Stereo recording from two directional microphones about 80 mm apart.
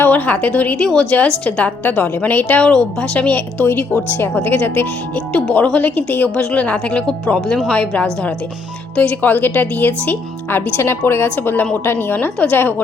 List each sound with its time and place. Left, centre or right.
0.0 s a sound: centre
0.3 s a woman's voice: centre
5.3 s a woman's voice: centre